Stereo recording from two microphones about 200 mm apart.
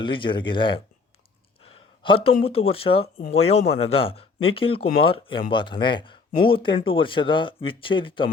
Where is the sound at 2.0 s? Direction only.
25° left (ahead or behind).